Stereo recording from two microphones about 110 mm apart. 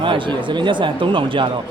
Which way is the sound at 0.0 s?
50° right (ahead or behind).